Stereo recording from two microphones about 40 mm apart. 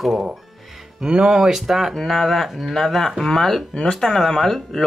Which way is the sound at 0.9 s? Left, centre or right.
Centre.